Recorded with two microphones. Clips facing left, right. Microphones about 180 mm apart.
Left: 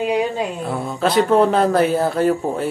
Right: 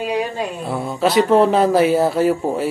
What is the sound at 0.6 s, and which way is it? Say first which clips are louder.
Speech: right 1 dB; 5° right (ahead or behind).